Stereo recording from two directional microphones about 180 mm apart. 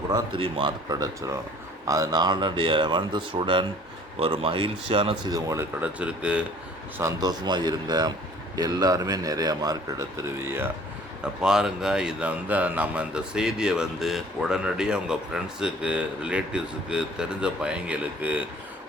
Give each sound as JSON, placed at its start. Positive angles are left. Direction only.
{"t": 0.1, "sound": "speech", "side_deg": -30}
{"t": 7.0, "sound": "speech", "side_deg": -20}